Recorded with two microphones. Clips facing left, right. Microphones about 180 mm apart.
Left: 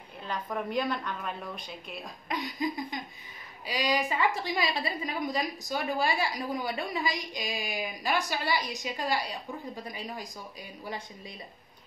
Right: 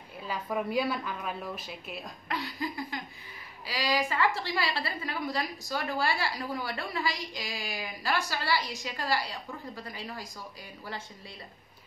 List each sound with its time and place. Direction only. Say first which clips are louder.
0.2 s a woman's voice: right 1 dB; 5° right (ahead or behind)
2.2 s a woman's voice: left 3 dB; 15° left (ahead or behind)